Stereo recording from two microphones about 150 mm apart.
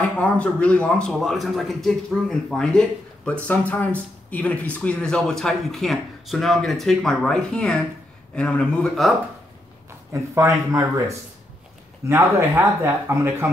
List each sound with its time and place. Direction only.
0.2 s a man's voice: 10° left (ahead or behind)
10.1 s speech: 20° right (ahead or behind)